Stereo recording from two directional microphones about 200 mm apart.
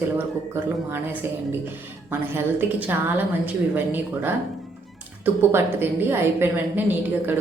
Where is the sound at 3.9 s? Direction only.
10° right (ahead or behind).